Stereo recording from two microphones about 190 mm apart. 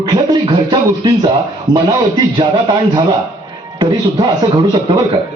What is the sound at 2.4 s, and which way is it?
A man's voice, 25° right (ahead or behind).